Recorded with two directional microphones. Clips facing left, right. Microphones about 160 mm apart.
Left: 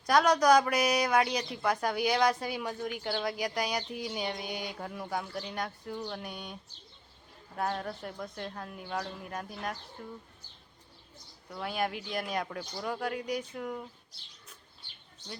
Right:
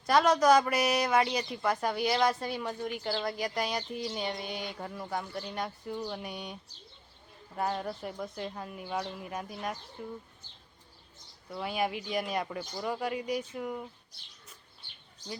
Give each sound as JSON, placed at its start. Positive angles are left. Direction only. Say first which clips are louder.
{"t": 0.0, "sound": "speech", "louder": "even", "side_deg": 0}
{"t": 11.5, "sound": "speech", "louder": "right 1 dB", "side_deg": -5}